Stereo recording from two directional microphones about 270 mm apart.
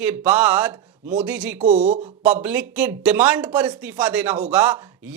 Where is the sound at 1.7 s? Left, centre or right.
Right.